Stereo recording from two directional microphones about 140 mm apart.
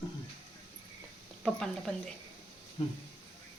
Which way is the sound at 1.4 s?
5° left (ahead or behind).